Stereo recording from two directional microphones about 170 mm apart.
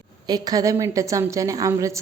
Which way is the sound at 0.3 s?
20° right (ahead or behind).